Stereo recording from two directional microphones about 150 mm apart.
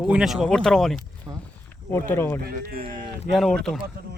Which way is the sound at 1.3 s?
15° right (ahead or behind).